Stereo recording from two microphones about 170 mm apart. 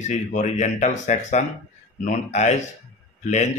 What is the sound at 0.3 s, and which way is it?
Speech, 45° left (ahead or behind).